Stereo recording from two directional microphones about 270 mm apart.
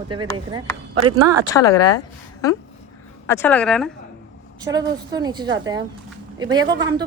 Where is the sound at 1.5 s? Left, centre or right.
Centre.